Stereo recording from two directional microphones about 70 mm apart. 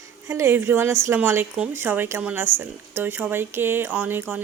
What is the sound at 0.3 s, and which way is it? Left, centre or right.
Speech, right.